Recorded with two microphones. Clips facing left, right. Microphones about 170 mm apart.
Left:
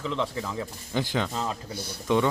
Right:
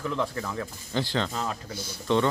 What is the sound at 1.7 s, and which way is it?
Speech, 60° left (ahead or behind).